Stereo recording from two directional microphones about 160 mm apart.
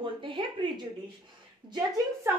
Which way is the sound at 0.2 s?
30° right (ahead or behind).